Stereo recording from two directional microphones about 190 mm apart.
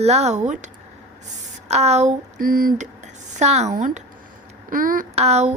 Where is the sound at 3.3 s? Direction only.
35° right (ahead or behind).